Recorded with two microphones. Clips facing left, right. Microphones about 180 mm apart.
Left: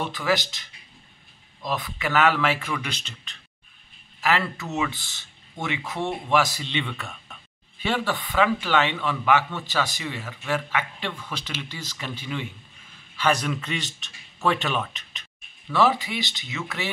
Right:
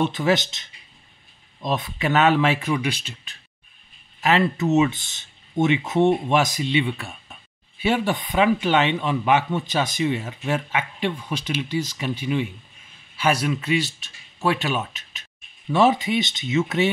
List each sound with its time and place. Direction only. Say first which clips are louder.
0.0 s speech: right 5 dB; 25° right (ahead or behind)
2.8 s a man's voice: right 8 dB; 10° right (ahead or behind)
4.2 s a man's voice: right 5 dB; 20° right (ahead or behind)
15.7 s speech: right 4 dB; 20° right (ahead or behind)